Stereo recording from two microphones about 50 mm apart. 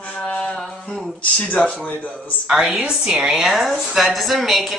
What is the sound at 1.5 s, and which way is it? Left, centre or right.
Speech, centre.